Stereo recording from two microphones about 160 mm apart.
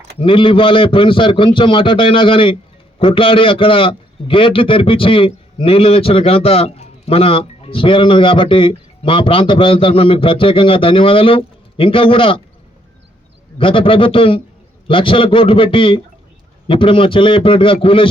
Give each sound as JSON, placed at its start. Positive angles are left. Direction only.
{"t": 0.2, "sound": "a man's voice", "side_deg": 30}
{"t": 13.6, "sound": "a man's voice", "side_deg": 35}